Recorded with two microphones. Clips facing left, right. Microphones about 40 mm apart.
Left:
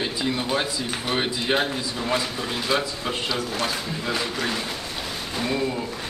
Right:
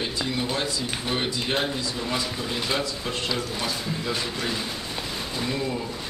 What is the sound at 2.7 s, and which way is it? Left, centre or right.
Speech, centre.